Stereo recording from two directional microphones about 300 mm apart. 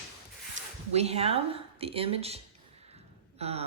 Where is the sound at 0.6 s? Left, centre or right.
Right.